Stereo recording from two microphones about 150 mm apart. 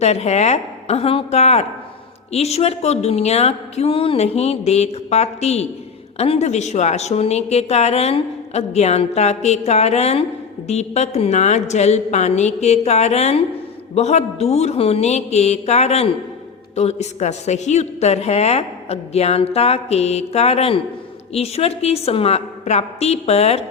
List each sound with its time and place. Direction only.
0.0 s a woman's voice: 45° left (ahead or behind)